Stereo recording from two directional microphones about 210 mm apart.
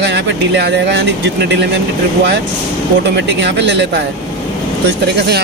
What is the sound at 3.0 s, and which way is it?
Speech, 55° right (ahead or behind).